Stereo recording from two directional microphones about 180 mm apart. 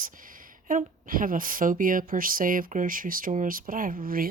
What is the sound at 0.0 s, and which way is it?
Speech, 50° right (ahead or behind).